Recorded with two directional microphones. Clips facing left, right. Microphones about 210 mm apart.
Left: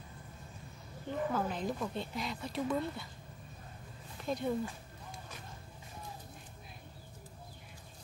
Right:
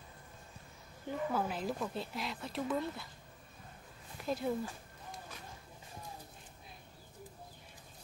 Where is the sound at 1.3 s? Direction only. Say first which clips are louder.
Left 1 dB; 5° right (ahead or behind).